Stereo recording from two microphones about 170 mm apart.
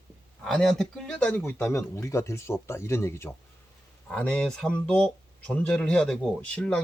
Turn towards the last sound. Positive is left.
turn(degrees=5)  # may be behind; listen again after turning